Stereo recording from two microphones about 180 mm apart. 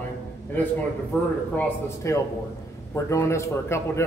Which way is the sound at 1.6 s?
15° left (ahead or behind).